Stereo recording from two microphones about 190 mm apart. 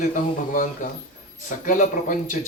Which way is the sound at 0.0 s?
45° left (ahead or behind).